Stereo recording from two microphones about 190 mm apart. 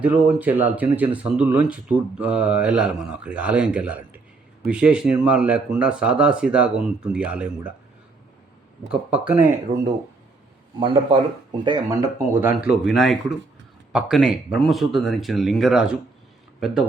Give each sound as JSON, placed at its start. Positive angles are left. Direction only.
{"t": 0.0, "sound": "speech", "side_deg": -10}
{"t": 8.9, "sound": "speech", "side_deg": -5}
{"t": 10.8, "sound": "speech", "side_deg": -25}